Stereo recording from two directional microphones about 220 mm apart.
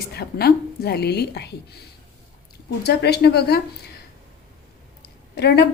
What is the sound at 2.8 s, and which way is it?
Speech, 50° left (ahead or behind).